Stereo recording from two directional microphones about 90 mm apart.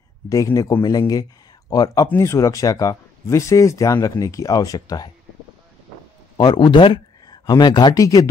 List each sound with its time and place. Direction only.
0.3 s speech: 40° left (ahead or behind)
2.0 s speech: 30° left (ahead or behind); by 5.1 s 50° left (ahead or behind)
6.3 s speech: 55° left (ahead or behind)
7.2 s speech: 50° left (ahead or behind)
7.9 s speech: 40° left (ahead or behind)